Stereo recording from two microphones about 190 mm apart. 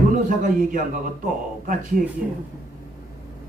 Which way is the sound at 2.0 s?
45° right (ahead or behind).